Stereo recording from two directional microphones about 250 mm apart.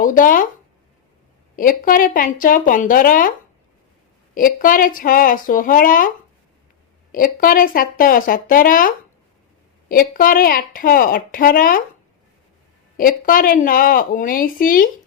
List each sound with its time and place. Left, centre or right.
0.0 s speech: left
1.5 s speech: left
4.4 s speech: left
7.1 s speech: left
13.0 s speech: left